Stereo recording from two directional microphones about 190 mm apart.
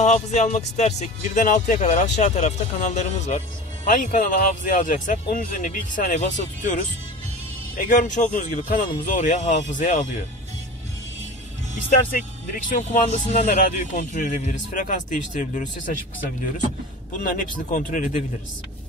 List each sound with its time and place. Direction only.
0.0 s speech: 35° left (ahead or behind)
12.6 s speech: 45° left (ahead or behind)
17.2 s speech: 45° left (ahead or behind)